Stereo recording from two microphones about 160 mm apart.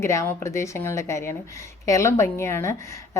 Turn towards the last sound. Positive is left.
turn(degrees=15)  # may be behind; listen again after turning